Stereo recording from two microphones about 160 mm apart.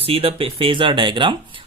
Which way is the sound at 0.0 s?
35° right (ahead or behind).